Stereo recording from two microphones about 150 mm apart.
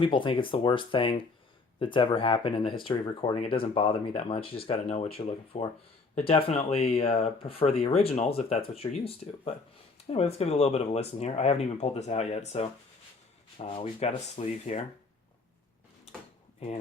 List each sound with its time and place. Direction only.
0.0 s speech: 35° left (ahead or behind)
16.6 s speech: 40° left (ahead or behind)